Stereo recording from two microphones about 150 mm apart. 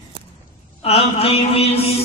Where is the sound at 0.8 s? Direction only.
45° left (ahead or behind).